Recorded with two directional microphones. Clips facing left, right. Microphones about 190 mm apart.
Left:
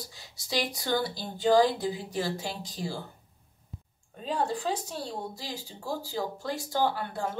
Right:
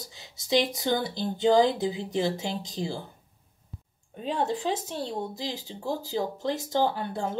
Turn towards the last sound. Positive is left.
turn(degrees=-20)  # may be behind; listen again after turning